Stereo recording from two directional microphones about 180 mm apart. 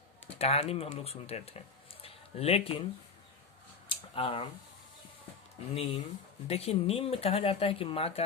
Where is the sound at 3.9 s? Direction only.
30° left (ahead or behind).